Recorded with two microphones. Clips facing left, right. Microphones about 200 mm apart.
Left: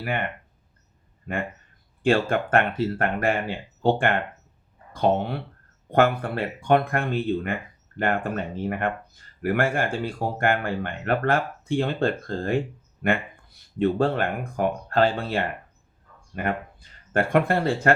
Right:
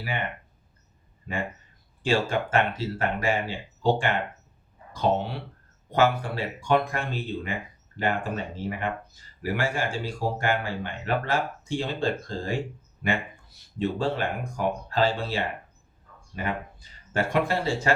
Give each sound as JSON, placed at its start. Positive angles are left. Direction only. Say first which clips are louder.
{"t": 0.0, "sound": "speech", "louder": "left 4 dB", "side_deg": 55}
{"t": 2.0, "sound": "speech", "louder": "left 4 dB", "side_deg": 55}